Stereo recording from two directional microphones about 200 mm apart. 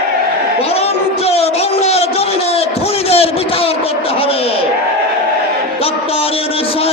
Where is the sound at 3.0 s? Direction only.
30° left (ahead or behind).